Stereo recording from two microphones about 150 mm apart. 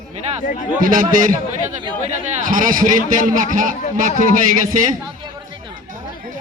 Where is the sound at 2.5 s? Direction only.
65° right (ahead or behind).